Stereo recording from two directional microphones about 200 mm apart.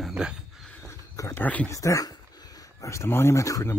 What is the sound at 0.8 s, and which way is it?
Speech, 15° left (ahead or behind).